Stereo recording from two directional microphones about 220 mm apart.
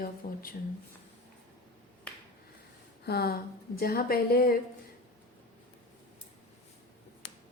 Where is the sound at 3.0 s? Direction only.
45° left (ahead or behind).